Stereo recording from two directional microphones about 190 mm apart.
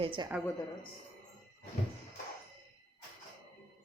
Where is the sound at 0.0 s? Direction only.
25° right (ahead or behind).